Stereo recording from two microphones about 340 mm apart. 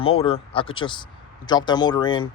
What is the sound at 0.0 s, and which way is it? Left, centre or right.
Speech, centre.